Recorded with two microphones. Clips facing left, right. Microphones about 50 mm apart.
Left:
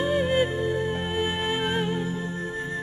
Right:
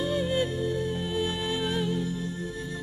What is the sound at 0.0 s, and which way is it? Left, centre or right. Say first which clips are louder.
Music: left 4 dB; left.